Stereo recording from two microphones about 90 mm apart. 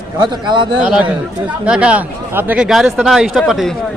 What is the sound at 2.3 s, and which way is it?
Speech, 25° right (ahead or behind).